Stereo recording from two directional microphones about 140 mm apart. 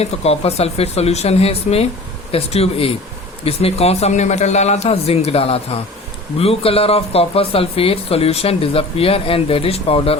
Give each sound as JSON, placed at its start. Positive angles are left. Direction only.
{"t": 0.0, "sound": "speech", "side_deg": 45}